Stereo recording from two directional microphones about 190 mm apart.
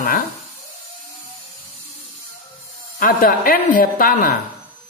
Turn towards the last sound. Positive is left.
turn(degrees=45)  # may be behind; listen again after turning